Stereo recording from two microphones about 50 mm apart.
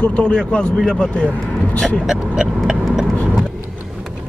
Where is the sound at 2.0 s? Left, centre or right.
Centre.